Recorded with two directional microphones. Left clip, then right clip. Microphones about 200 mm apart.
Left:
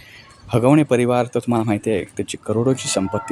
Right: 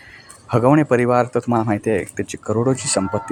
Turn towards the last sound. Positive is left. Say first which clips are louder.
# right 1 dB
turn(degrees=10)  # may be behind; listen again after turning